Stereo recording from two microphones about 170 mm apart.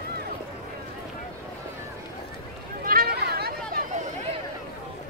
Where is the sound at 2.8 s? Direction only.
60° right (ahead or behind).